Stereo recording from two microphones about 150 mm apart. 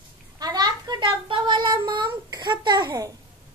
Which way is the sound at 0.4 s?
25° right (ahead or behind).